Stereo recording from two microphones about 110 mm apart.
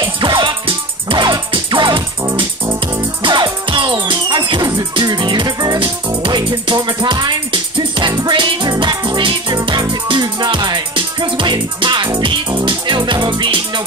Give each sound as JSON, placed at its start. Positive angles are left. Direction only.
{"t": 0.0, "sound": "music", "side_deg": -45}